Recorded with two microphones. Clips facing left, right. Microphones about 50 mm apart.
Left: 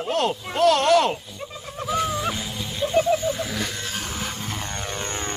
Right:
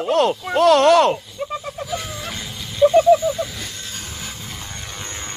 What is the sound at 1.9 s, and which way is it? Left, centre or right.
Music, centre.